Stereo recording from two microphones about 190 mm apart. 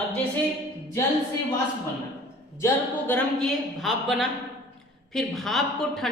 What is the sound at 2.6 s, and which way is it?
A woman's voice, 10° left (ahead or behind).